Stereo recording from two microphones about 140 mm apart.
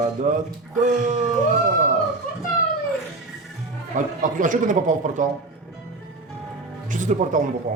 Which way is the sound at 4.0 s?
65° right (ahead or behind).